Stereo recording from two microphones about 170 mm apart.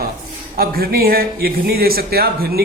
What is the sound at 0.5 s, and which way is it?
Speech, 60° right (ahead or behind).